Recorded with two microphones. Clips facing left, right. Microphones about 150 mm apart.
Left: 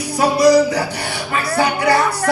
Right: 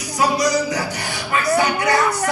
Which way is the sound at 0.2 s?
30° left (ahead or behind).